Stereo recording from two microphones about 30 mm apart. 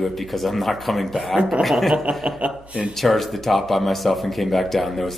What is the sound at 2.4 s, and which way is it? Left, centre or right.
Speech, right.